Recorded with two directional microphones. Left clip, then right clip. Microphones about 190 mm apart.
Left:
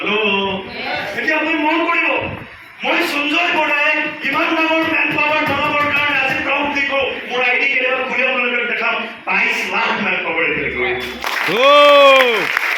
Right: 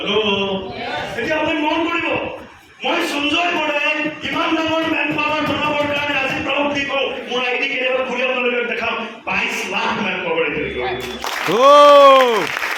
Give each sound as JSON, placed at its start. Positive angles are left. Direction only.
{"t": 11.5, "sound": "speech", "side_deg": -25}